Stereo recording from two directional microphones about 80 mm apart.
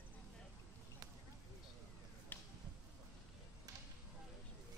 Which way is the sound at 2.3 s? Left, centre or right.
Left.